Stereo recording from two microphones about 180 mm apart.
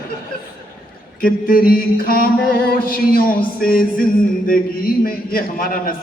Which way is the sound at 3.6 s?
55° left (ahead or behind).